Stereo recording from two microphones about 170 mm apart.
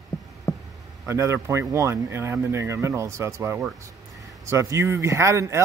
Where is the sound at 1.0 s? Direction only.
15° right (ahead or behind).